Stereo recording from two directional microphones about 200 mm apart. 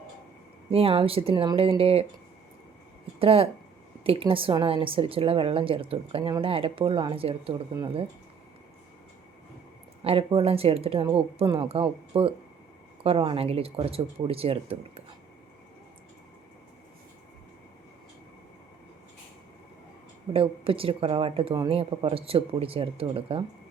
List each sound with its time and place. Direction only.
0.7 s a woman's voice: 30° right (ahead or behind)
3.2 s a woman's voice: 30° right (ahead or behind)
10.0 s a woman's voice: 30° right (ahead or behind)
20.3 s a woman's voice: 25° right (ahead or behind)